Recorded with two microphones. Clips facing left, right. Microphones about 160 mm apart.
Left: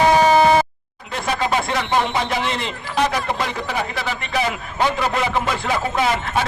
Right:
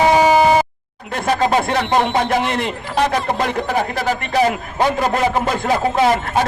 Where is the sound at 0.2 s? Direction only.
10° right (ahead or behind).